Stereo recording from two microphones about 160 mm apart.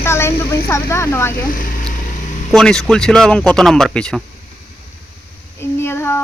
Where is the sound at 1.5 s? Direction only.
60° left (ahead or behind).